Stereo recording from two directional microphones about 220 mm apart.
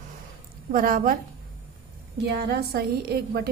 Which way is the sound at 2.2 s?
45° right (ahead or behind).